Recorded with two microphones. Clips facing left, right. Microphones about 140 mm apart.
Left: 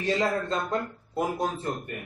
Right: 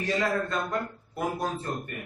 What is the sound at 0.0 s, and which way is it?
A man's voice, 25° left (ahead or behind).